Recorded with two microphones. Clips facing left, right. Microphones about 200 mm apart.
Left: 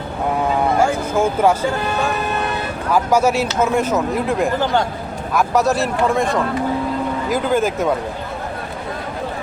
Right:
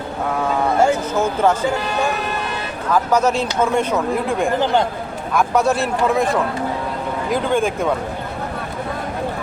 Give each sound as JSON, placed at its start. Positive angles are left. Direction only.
{"t": 1.1, "sound": "speech", "side_deg": 10}
{"t": 2.9, "sound": "speech", "side_deg": 10}
{"t": 4.6, "sound": "a man's voice", "side_deg": -20}
{"t": 5.3, "sound": "speech", "side_deg": 0}